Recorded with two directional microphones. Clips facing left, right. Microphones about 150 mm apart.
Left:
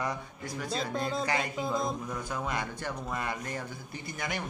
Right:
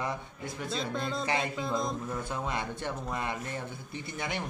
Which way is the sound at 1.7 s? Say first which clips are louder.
Left 2 dB; centre (ahead or behind).